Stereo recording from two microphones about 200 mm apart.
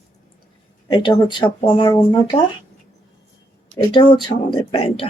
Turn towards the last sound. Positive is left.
turn(degrees=25)  # may be behind; listen again after turning